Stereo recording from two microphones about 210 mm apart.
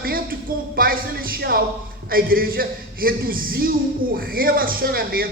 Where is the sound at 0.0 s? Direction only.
45° right (ahead or behind).